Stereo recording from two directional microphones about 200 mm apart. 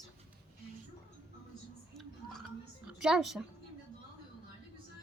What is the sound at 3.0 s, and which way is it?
Speech, 5° right (ahead or behind).